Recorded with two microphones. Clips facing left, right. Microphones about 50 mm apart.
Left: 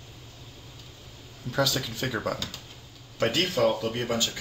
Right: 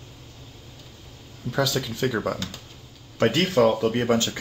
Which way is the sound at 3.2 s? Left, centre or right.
Right.